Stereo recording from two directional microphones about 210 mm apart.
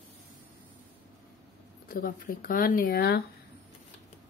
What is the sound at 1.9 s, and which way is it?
Speech, 40° left (ahead or behind).